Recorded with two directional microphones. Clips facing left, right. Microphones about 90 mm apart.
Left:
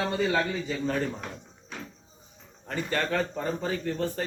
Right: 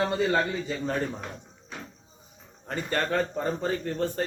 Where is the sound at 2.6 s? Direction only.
30° right (ahead or behind).